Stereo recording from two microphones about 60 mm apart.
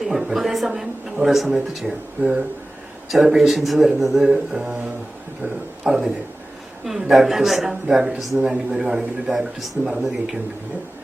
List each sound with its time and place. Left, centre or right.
0.0 s a woman's voice: centre
2.2 s speech: right
3.1 s a woman's voice: centre
5.8 s a woman's voice: centre
8.4 s a woman's voice: centre
9.3 s a woman's voice: centre